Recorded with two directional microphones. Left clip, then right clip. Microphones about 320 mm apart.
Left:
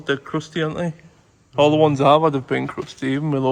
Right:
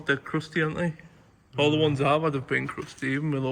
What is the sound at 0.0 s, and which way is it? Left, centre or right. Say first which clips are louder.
Speech: left 4 dB; centre.